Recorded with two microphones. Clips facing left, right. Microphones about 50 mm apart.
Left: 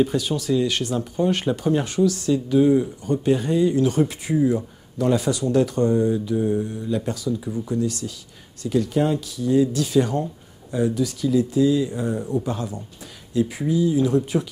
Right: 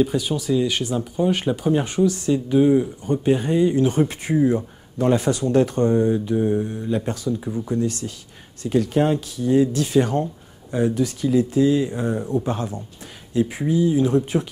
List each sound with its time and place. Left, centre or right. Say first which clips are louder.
0.0 s speech: even; centre; by 4.1 s right
4.1 s speech: right 1 dB; right